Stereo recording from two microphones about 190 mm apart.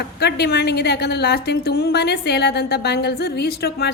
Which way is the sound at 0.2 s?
60° left (ahead or behind).